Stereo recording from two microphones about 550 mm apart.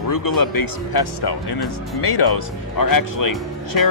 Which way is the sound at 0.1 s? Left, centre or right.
Left.